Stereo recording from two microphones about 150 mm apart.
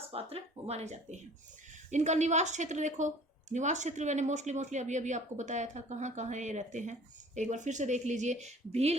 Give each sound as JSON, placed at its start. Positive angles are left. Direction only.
{"t": 0.1, "sound": "speech", "side_deg": -40}